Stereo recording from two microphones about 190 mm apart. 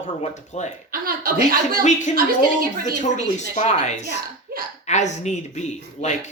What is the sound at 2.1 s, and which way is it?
Speech, 50° right (ahead or behind).